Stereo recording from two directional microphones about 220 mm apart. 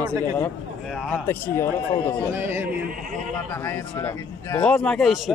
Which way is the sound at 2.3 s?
10° right (ahead or behind).